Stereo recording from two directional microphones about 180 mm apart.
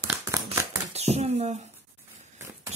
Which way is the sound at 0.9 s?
35° right (ahead or behind).